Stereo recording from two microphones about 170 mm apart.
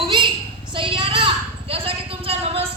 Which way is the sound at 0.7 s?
30° right (ahead or behind).